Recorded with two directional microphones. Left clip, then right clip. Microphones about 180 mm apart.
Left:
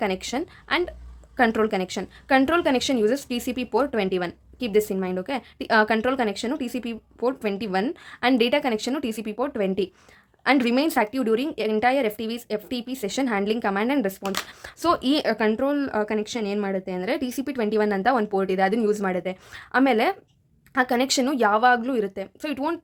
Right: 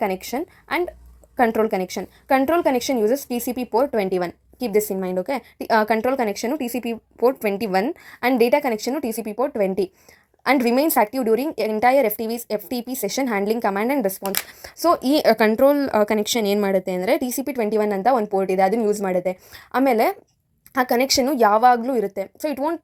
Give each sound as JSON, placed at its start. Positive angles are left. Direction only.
{"t": 0.0, "sound": "a woman's voice", "side_deg": -25}
{"t": 15.2, "sound": "a woman's voice", "side_deg": -45}